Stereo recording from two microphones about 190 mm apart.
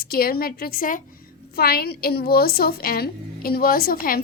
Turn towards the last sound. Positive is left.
turn(degrees=50)  # may be behind; listen again after turning